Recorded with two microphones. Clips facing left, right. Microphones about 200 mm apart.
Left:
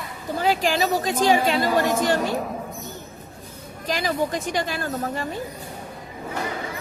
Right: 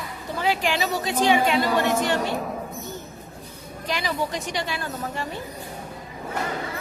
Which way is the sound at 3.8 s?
45° left (ahead or behind).